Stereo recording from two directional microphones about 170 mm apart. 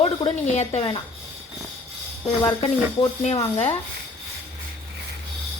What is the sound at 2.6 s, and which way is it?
Speech, 35° left (ahead or behind).